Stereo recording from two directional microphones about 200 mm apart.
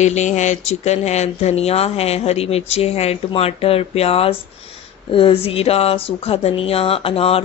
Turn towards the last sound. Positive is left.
turn(degrees=30)  # may be behind; listen again after turning